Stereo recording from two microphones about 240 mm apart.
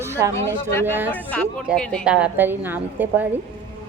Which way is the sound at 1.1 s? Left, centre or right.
Centre.